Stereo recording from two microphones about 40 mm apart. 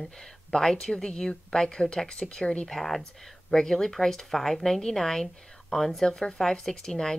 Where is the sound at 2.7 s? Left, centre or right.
Centre.